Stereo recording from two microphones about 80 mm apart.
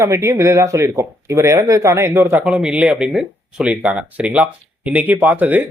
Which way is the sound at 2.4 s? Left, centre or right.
Centre.